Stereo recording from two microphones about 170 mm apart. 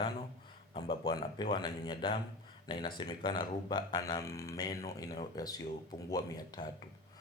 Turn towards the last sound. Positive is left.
turn(degrees=20)  # may be behind; listen again after turning